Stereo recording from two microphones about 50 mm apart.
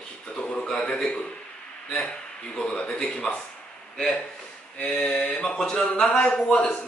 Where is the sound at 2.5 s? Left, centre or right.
Left.